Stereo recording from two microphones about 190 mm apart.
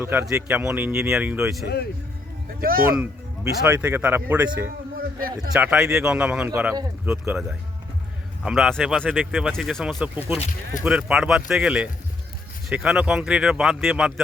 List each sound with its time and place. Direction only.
0.0 s speech: 10° right (ahead or behind)
1.6 s speech: 60° left (ahead or behind)
2.6 s speech: 50° right (ahead or behind)
3.0 s speech: 5° right (ahead or behind)
5.5 s speech: 5° right (ahead or behind)
8.4 s speech: centre (ahead or behind)